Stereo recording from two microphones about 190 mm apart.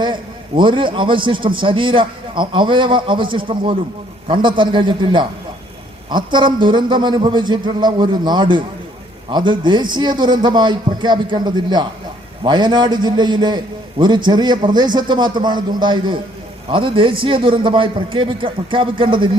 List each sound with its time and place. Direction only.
0.0 s a man's voice: 25° right (ahead or behind)